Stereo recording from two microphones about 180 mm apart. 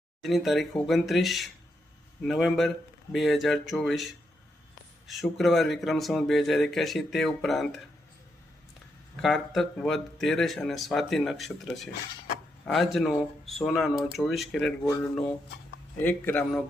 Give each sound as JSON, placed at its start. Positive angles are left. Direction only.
{"t": 0.2, "sound": "a man's voice", "side_deg": 0}
{"t": 9.2, "sound": "a man's voice", "side_deg": 0}
{"t": 16.0, "sound": "a man's voice", "side_deg": 10}